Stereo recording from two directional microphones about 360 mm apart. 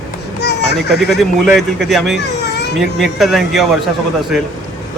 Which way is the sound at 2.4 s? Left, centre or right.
Left.